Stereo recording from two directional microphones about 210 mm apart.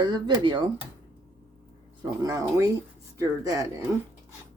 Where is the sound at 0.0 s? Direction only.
20° right (ahead or behind).